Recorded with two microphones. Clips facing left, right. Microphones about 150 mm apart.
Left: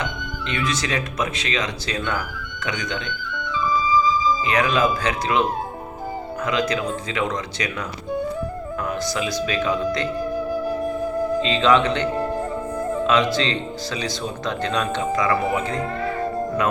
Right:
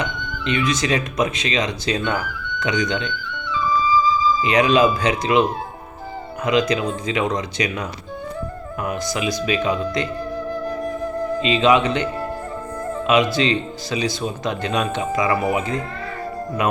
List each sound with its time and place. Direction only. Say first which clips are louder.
0.0 s speech: right 3 dB; 15° right (ahead or behind)
4.4 s speech: right 6 dB; 20° right (ahead or behind)
8.8 s speech: right 2 dB; 15° right (ahead or behind)
11.4 s speech: right 3 dB; 15° right (ahead or behind)
13.3 s speech: right 3 dB; 10° right (ahead or behind)